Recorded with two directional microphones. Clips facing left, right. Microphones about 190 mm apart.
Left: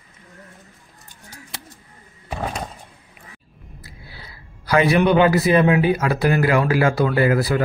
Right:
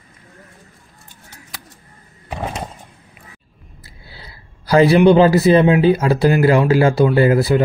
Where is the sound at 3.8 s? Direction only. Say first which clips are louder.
Right 2 dB; 30° right (ahead or behind).